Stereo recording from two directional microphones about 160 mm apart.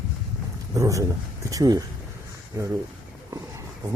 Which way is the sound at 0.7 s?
20° right (ahead or behind).